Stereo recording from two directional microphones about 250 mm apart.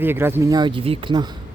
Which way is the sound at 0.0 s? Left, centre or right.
Centre.